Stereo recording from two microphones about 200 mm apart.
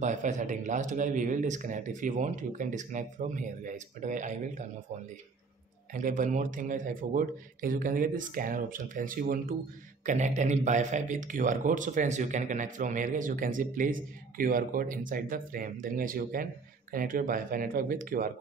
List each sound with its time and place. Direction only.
0.0 s a man's voice: 35° right (ahead or behind)
5.9 s a man's voice: 40° right (ahead or behind)